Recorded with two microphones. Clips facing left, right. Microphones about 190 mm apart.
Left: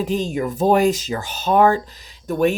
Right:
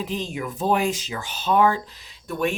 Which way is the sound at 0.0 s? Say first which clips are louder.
Left 7 dB; 45° left (ahead or behind).